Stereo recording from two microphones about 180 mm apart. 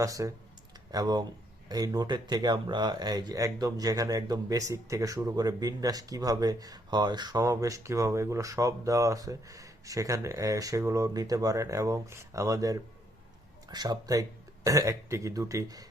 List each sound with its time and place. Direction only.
0.0 s speech: 20° right (ahead or behind)